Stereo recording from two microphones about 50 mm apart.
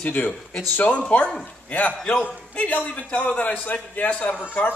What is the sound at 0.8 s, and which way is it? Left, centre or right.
A man's voice, left.